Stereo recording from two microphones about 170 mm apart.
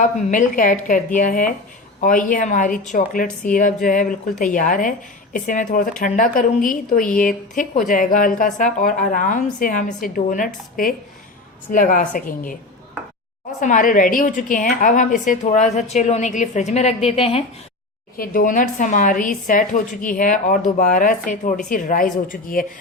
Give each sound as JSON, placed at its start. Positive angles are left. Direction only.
{"t": 0.0, "sound": "speech", "side_deg": 50}
{"t": 13.6, "sound": "speech", "side_deg": 50}
{"t": 18.2, "sound": "speech", "side_deg": 55}